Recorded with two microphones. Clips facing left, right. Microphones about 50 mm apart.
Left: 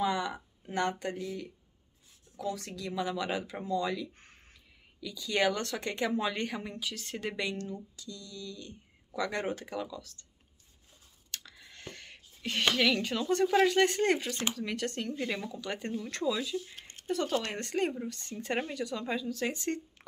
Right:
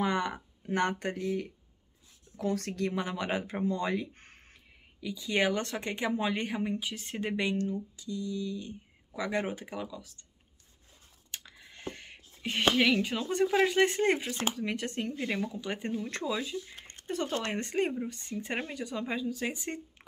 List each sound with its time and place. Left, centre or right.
0.0 s speech: right
5.0 s speech: right
11.3 s speech: centre